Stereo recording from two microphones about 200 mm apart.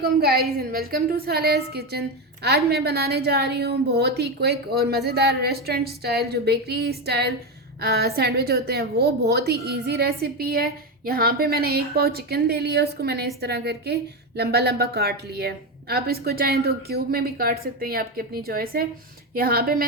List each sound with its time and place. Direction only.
0.0 s a woman's voice: 50° right (ahead or behind)